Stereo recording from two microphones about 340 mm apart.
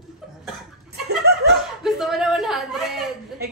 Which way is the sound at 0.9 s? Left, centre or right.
Right.